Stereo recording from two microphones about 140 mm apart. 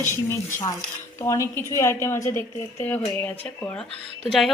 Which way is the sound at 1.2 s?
20° left (ahead or behind).